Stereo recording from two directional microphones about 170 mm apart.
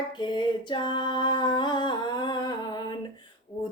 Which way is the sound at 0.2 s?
25° left (ahead or behind).